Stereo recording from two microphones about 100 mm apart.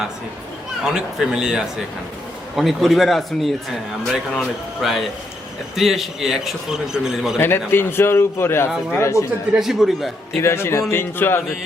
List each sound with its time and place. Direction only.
0.9 s a man's voice: 5° right (ahead or behind)
7.3 s a man's voice: 25° left (ahead or behind)
9.6 s speech: centre (ahead or behind)
10.4 s a man's voice: 25° left (ahead or behind)